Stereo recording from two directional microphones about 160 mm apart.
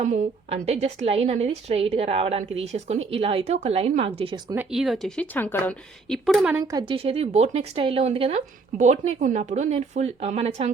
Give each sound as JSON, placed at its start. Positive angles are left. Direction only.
{"t": 0.0, "sound": "a woman's voice", "side_deg": -50}
{"t": 4.5, "sound": "a woman's voice", "side_deg": -5}
{"t": 6.7, "sound": "a woman's voice", "side_deg": -25}
{"t": 6.9, "sound": "a woman's voice", "side_deg": -40}